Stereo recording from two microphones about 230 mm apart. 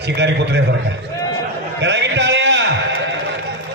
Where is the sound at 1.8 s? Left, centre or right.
Right.